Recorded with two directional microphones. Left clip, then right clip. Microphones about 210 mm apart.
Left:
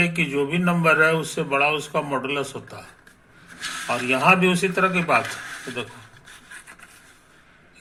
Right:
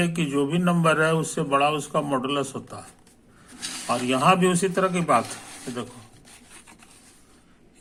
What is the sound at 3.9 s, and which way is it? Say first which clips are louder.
A man's voice: left 2 dB; 30° right (ahead or behind).